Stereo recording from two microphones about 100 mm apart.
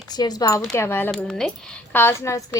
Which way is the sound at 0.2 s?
40° left (ahead or behind).